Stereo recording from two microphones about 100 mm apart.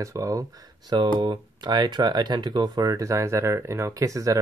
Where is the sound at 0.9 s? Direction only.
45° right (ahead or behind).